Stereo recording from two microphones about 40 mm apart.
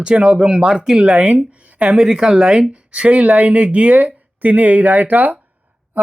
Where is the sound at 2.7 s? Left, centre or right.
Right.